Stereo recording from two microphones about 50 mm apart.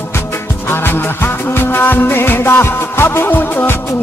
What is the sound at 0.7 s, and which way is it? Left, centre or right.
Music, left.